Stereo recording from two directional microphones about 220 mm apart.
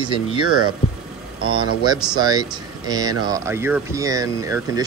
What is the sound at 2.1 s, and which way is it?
Speech, 15° right (ahead or behind).